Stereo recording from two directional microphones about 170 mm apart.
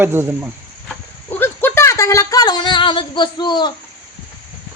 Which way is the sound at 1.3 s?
10° left (ahead or behind).